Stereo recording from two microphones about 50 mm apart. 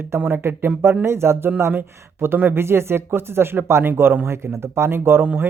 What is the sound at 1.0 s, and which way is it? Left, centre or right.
Speech, right.